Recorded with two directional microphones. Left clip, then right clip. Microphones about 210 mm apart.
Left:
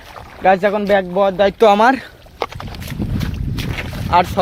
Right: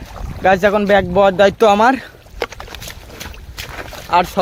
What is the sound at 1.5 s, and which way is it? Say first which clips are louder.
Speech: even; 5° right (ahead or behind).